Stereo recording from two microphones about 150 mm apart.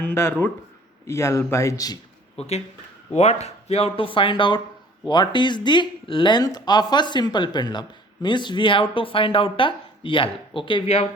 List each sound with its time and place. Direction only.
0.0 s a man's voice: 15° left (ahead or behind)
2.4 s speech: 40° left (ahead or behind)